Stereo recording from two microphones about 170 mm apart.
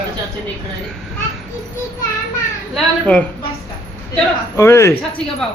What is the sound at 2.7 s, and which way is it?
Speech, 5° left (ahead or behind).